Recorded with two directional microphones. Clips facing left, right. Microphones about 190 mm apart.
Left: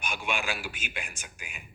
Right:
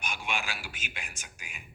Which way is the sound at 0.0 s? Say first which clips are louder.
Left 3 dB; 55° left (ahead or behind).